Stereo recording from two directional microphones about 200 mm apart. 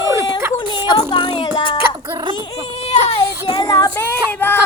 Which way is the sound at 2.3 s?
30° left (ahead or behind).